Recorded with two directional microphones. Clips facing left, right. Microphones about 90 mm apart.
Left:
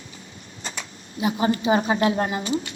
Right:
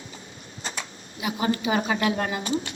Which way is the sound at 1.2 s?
30° left (ahead or behind).